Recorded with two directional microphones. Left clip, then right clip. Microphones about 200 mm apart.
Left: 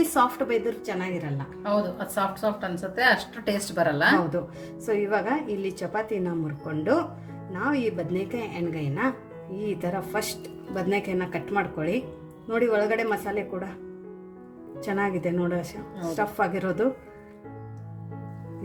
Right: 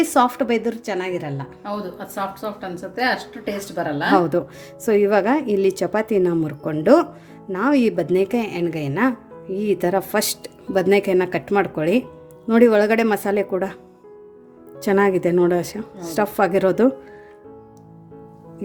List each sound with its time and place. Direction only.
0.1 s a woman's voice: 45° right (ahead or behind)
1.6 s a woman's voice: 10° right (ahead or behind)
4.9 s a woman's voice: 50° right (ahead or behind)
14.8 s speech: 55° right (ahead or behind)